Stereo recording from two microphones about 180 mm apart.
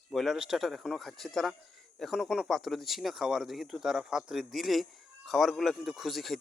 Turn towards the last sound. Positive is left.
turn(degrees=0)  # may be behind; listen again after turning